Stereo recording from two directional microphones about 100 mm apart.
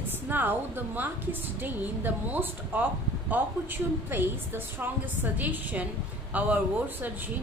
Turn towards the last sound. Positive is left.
turn(degrees=-15)  # may be behind; listen again after turning